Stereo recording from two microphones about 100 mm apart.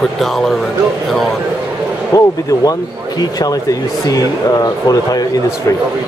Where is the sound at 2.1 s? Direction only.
30° left (ahead or behind).